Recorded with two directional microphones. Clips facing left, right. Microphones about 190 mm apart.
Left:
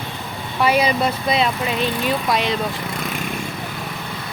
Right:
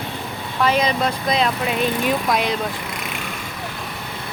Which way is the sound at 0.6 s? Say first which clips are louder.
Left 1 dB; 10° left (ahead or behind).